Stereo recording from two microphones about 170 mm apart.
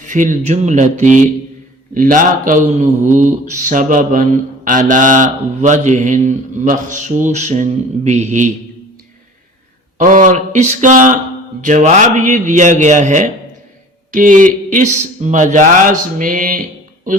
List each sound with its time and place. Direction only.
0.0 s mantra: 50° right (ahead or behind)
10.0 s mantra: 50° right (ahead or behind)
14.1 s speech: 50° right (ahead or behind)
15.2 s mantra: 45° right (ahead or behind)